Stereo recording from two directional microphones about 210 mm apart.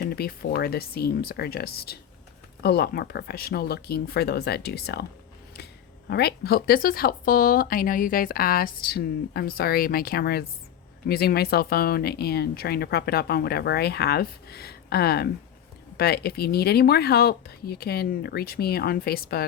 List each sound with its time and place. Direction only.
0.0 s speech: 50° left (ahead or behind)
6.1 s speech: 50° left (ahead or behind)